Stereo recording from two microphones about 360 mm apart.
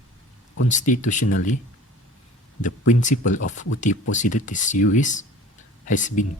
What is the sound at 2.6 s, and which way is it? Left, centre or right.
Speech, left.